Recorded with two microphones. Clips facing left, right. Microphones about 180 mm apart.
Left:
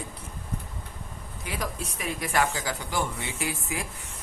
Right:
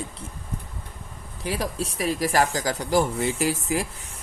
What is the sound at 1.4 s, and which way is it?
A man's voice, 35° right (ahead or behind).